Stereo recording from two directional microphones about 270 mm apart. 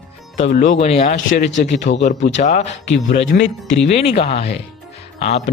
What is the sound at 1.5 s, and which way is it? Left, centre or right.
Speech, left.